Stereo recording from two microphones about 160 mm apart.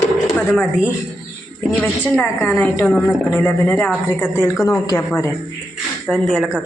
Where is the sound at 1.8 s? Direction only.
10° left (ahead or behind).